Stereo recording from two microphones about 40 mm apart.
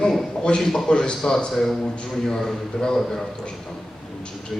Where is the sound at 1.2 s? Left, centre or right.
Centre.